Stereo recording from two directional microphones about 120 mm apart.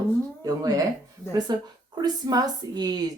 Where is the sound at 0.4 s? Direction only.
30° right (ahead or behind).